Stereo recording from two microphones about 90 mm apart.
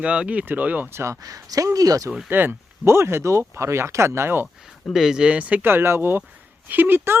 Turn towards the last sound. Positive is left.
turn(degrees=-20)  # may be behind; listen again after turning